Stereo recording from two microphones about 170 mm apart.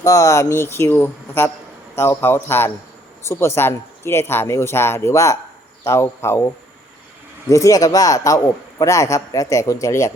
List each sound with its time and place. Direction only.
0.0 s speech: 20° left (ahead or behind)
7.5 s a man's voice: 20° left (ahead or behind)